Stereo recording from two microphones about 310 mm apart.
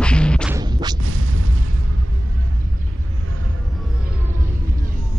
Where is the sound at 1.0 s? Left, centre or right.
Right.